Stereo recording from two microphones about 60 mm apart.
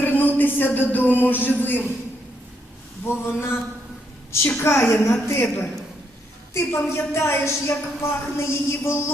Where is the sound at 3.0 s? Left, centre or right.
Left.